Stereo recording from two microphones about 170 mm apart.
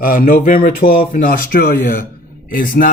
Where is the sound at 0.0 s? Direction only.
55° left (ahead or behind).